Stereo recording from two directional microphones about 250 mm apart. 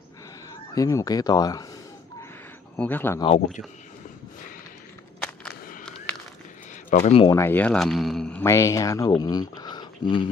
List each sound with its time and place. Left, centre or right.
0.7 s speech: centre
2.7 s speech: centre
5.5 s a sound: left
6.9 s speech: left
7.3 s speech: centre